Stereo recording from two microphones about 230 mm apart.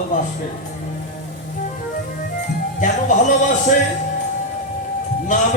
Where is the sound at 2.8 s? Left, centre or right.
Left.